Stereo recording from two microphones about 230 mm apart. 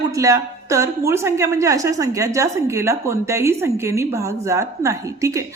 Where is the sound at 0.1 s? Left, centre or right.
Centre.